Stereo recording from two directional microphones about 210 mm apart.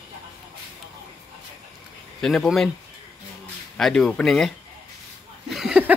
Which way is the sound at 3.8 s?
5° left (ahead or behind).